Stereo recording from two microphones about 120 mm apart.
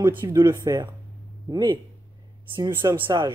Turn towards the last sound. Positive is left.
turn(degrees=-40)  # may be behind; listen again after turning